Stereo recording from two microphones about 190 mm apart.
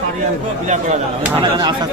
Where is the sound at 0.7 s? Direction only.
35° right (ahead or behind).